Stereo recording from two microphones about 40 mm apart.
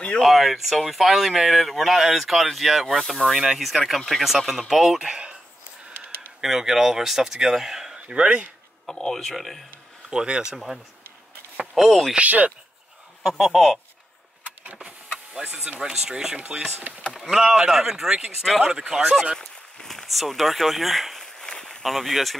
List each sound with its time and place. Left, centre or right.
0.2 s speech: centre
6.4 s speech: centre
9.0 s speech: centre
10.0 s speech: right
11.6 s speech: centre
12.2 s speech: right
13.2 s speech: centre
14.4 s vehicle: right
15.0 s power windows: centre
15.8 s speech: centre
17.1 s speech: centre
19.3 s speech: centre
21.2 s a sound: centre
21.8 s speech: centre